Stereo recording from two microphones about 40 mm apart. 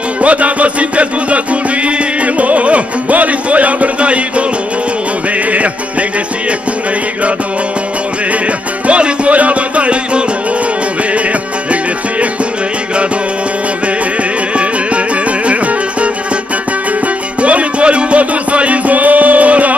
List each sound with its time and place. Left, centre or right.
0.2 s music: right
5.5 s music: right
8.8 s music: right
15.4 s music: right
17.4 s music: right